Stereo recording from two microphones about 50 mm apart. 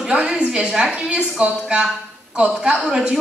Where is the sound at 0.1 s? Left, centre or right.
Right.